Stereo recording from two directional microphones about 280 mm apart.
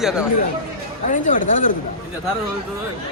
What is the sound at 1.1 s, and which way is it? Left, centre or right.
Speech, left.